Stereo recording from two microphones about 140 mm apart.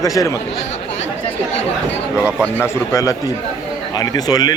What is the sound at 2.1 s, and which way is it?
Speech, 10° right (ahead or behind).